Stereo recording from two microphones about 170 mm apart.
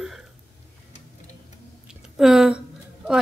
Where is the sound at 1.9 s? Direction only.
Centre (ahead or behind).